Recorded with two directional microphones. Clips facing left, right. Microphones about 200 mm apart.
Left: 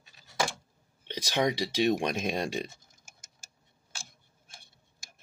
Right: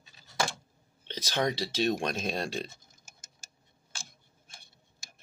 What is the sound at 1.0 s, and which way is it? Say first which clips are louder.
Speech: left 2 dB; 15° left (ahead or behind).